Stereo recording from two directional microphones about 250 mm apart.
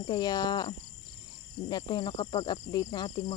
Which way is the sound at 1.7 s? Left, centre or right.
Centre.